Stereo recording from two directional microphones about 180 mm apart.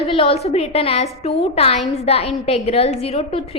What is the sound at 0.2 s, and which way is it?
A woman's voice, 35° left (ahead or behind).